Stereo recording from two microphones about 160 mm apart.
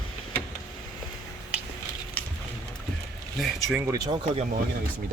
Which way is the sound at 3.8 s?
20° right (ahead or behind).